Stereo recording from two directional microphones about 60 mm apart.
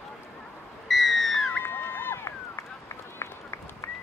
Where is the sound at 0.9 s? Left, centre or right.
Centre.